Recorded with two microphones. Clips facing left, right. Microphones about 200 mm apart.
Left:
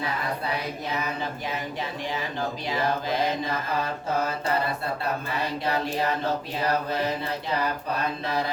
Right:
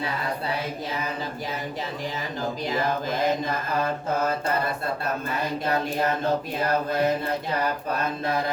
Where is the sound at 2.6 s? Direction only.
45° right (ahead or behind).